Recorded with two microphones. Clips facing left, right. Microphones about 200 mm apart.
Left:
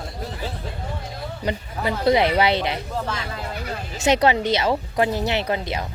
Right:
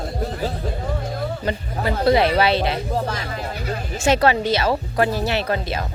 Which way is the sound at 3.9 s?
20° left (ahead or behind).